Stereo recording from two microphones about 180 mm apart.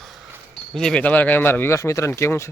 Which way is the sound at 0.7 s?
5° left (ahead or behind).